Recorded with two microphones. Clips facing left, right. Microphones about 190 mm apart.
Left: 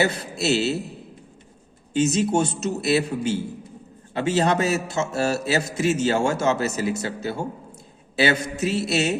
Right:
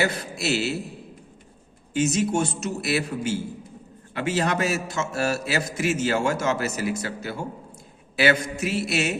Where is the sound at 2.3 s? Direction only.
25° left (ahead or behind).